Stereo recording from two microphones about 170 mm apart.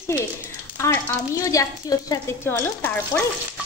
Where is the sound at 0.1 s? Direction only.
15° left (ahead or behind).